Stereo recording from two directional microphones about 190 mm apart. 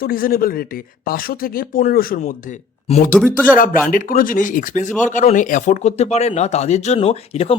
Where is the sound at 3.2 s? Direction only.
Centre (ahead or behind).